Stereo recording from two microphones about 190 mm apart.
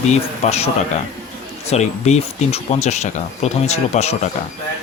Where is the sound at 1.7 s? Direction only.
35° left (ahead or behind).